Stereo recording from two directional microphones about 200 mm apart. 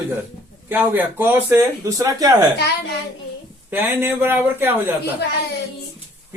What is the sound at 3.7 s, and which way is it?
Speech, 10° right (ahead or behind).